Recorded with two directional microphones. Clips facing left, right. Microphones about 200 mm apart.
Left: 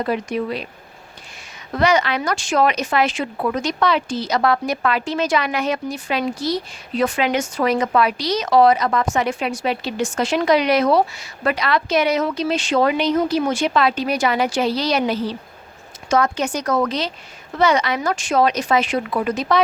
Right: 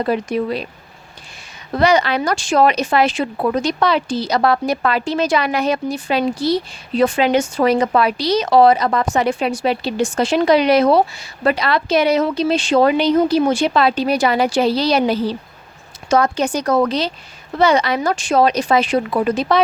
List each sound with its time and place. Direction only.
0.0 s speech: 35° right (ahead or behind)
1.7 s speech: 35° right (ahead or behind)